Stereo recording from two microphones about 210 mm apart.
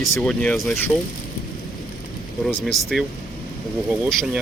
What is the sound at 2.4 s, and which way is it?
Speech, centre (ahead or behind).